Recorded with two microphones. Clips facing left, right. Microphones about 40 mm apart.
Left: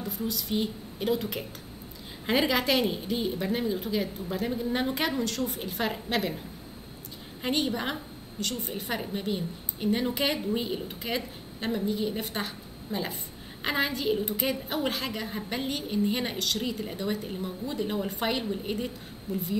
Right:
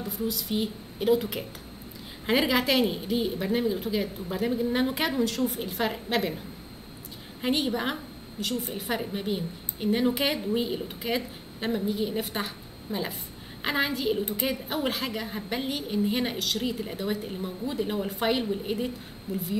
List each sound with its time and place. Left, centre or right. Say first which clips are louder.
0.0 s a woman's voice: right 2 dB; centre
7.4 s a woman's voice: right 2 dB; centre